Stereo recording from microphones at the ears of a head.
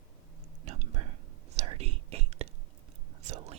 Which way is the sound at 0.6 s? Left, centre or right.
Right.